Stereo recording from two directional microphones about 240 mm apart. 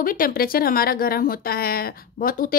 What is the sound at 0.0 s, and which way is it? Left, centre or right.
A woman's voice, left.